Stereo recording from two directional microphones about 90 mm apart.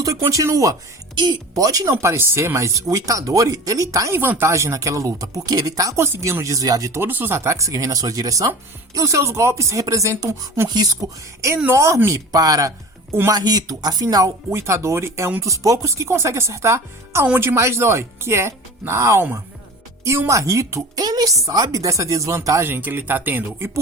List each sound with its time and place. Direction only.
0.3 s speech: 40° right (ahead or behind)
6.9 s speech: 25° right (ahead or behind); by 14.3 s 45° right (ahead or behind)
14.5 s speech: 30° right (ahead or behind)
21.0 s speech: 45° right (ahead or behind); by 23.8 s 30° right (ahead or behind)